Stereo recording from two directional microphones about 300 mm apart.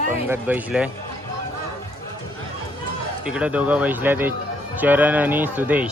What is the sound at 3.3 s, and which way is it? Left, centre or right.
A man's voice, centre.